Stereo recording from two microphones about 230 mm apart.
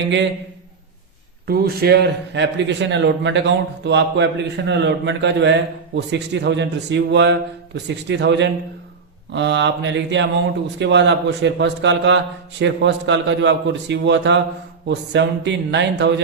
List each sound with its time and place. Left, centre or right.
1.5 s speech: right